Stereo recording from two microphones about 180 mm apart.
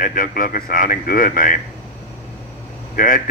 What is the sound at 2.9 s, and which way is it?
Speech, 50° left (ahead or behind).